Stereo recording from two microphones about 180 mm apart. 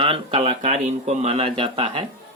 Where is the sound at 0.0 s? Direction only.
30° right (ahead or behind).